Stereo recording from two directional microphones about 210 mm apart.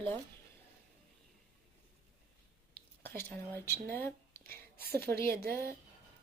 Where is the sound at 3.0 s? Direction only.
10° left (ahead or behind).